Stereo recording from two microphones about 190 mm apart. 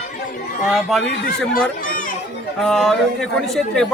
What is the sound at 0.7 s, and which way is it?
Speech, centre (ahead or behind).